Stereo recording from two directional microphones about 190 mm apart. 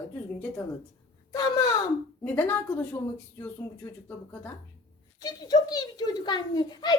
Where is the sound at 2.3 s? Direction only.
10° left (ahead or behind).